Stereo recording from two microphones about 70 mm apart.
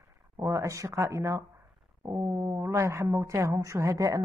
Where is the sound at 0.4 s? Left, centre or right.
Right.